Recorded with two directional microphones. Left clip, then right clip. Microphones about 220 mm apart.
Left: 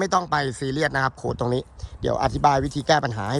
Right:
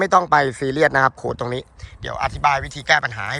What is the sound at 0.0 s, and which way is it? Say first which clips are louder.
A man's voice: right 7 dB; 10° left (ahead or behind).